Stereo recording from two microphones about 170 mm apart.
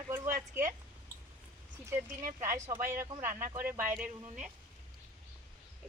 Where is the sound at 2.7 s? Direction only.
55° right (ahead or behind).